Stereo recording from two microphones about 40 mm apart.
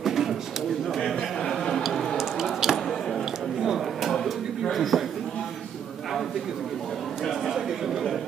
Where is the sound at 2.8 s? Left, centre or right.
Centre.